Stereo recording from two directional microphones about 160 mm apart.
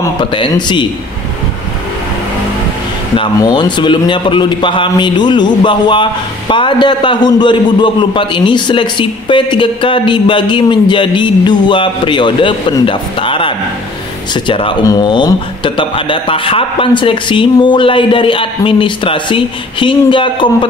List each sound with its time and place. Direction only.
0.2 s a man's voice: 30° left (ahead or behind)
3.2 s a man's voice: 30° left (ahead or behind)